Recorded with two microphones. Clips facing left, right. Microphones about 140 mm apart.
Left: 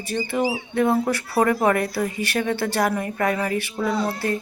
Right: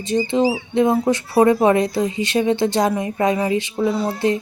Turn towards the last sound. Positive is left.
turn(degrees=-20)  # may be behind; listen again after turning